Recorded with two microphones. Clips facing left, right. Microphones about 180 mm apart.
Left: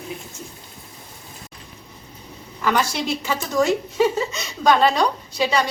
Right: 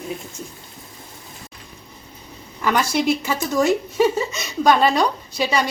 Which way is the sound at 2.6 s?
10° right (ahead or behind).